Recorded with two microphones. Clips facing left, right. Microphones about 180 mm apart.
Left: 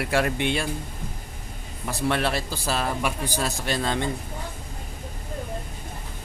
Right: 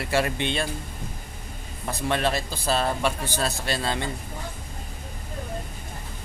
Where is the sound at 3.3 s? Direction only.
15° left (ahead or behind).